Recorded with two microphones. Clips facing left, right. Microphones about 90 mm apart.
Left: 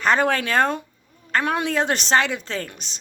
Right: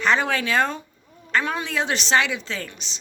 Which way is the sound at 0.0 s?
45° left (ahead or behind).